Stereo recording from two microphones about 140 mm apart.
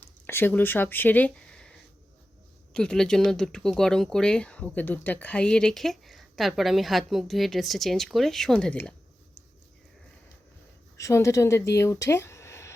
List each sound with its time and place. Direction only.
0.3 s speech: 15° left (ahead or behind)
2.7 s speech: 5° left (ahead or behind)
10.9 s speech: 20° left (ahead or behind)